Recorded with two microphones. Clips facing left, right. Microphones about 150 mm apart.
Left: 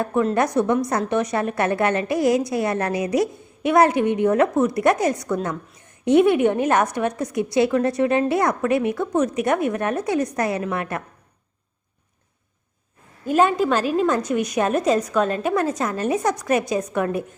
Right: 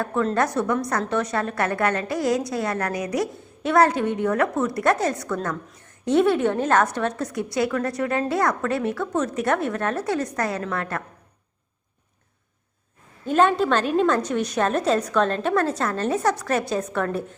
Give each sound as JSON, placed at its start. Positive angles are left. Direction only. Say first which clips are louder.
{"t": 0.0, "sound": "a woman's voice", "louder": "left 2 dB", "side_deg": 15}
{"t": 13.2, "sound": "a woman's voice", "louder": "left 1 dB", "side_deg": 5}